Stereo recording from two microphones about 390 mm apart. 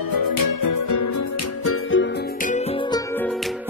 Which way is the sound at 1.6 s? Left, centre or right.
Left.